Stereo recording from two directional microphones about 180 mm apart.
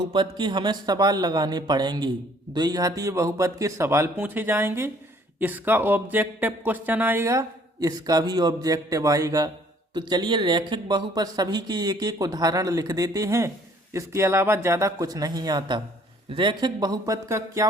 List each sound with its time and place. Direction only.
0.1 s speech: 25° right (ahead or behind)